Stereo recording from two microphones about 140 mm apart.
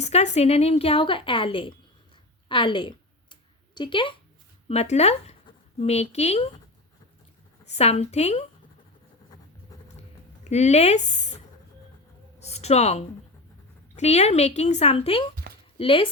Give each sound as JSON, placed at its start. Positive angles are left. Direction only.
{"t": 0.0, "sound": "a woman's voice", "side_deg": 50}
{"t": 2.5, "sound": "a sound", "side_deg": 35}
{"t": 3.8, "sound": "speech", "side_deg": 35}
{"t": 4.7, "sound": "a woman's voice", "side_deg": 50}
{"t": 7.6, "sound": "a woman's voice", "side_deg": 50}
{"t": 10.4, "sound": "speech", "side_deg": 55}
{"t": 12.4, "sound": "a sound", "side_deg": 50}
{"t": 13.9, "sound": "a woman's voice", "side_deg": 50}
{"t": 15.5, "sound": "a sound", "side_deg": -90}
{"t": 15.8, "sound": "speech", "side_deg": 40}